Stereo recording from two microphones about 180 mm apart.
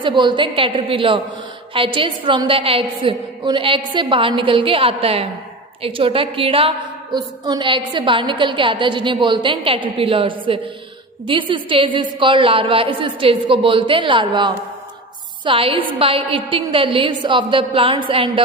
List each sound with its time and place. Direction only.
0.0 s a woman's voice: 25° right (ahead or behind)